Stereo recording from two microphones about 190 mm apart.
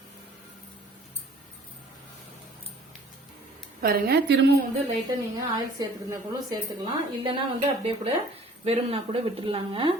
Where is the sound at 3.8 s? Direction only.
55° right (ahead or behind).